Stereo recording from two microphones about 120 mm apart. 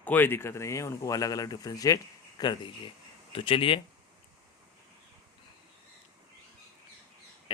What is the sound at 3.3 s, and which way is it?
Speech, 50° left (ahead or behind).